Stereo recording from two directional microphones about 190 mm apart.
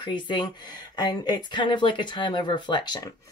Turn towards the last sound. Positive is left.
turn(degrees=20)  # may be behind; listen again after turning